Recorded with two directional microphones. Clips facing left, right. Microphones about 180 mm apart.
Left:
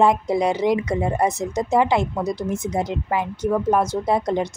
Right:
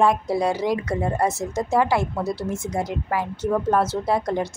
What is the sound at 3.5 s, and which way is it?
Speech, 10° left (ahead or behind).